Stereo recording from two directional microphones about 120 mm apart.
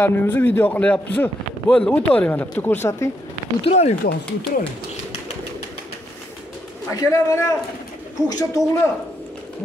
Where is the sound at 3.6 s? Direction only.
65° left (ahead or behind).